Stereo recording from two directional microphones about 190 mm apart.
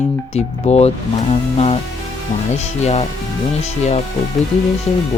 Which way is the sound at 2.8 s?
35° left (ahead or behind).